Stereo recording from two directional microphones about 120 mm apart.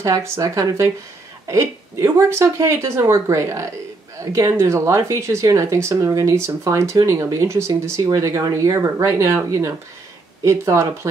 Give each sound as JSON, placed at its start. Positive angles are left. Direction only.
{"t": 0.0, "sound": "speech", "side_deg": -25}